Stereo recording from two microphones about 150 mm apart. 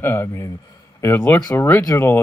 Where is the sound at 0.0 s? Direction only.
15° left (ahead or behind).